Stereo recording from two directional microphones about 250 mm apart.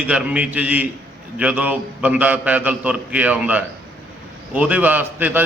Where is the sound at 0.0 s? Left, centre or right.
Centre.